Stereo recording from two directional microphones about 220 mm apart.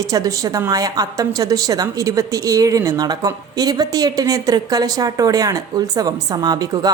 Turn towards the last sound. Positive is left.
turn(degrees=-15)  # may be behind; listen again after turning